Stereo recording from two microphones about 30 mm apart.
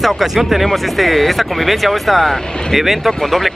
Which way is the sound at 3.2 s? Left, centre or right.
Centre.